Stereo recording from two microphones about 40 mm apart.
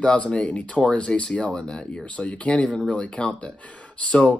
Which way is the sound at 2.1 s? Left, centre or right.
Left.